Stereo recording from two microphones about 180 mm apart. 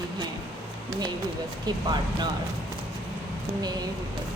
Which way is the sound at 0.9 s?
20° right (ahead or behind).